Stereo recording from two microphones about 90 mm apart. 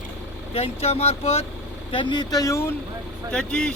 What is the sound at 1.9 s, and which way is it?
Speech, 60° left (ahead or behind).